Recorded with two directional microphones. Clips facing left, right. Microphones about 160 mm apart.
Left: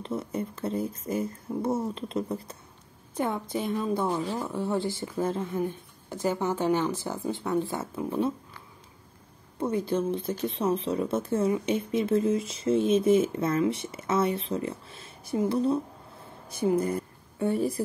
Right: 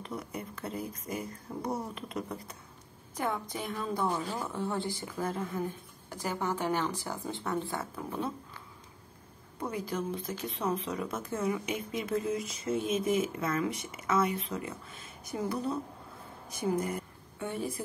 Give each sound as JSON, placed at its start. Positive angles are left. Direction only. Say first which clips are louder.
{"t": 0.0, "sound": "a woman's voice", "louder": "left 7 dB", "side_deg": 25}
{"t": 3.5, "sound": "a woman's voice", "louder": "left 6 dB", "side_deg": 25}
{"t": 9.6, "sound": "a woman's voice", "louder": "left 7 dB", "side_deg": 30}